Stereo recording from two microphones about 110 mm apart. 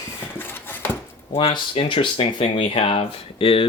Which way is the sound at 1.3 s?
55° left (ahead or behind).